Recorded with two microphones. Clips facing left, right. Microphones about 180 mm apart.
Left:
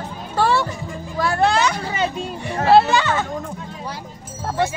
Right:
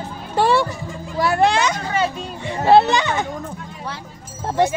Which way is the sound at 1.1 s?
20° right (ahead or behind).